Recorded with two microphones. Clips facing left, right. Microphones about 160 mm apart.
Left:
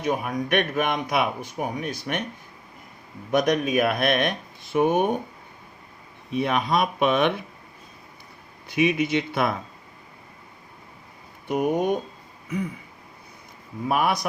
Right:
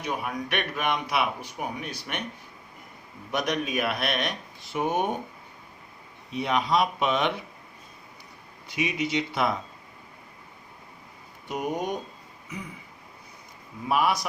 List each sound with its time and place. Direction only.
0.0 s a man's voice: 45° left (ahead or behind)
3.3 s a man's voice: 50° left (ahead or behind)
6.3 s a man's voice: 55° left (ahead or behind)
8.6 s speech: 55° left (ahead or behind)
11.4 s speech: 55° left (ahead or behind)
13.8 s speech: 55° left (ahead or behind)